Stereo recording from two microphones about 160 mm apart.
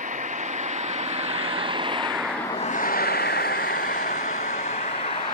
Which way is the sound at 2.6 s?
60° left (ahead or behind).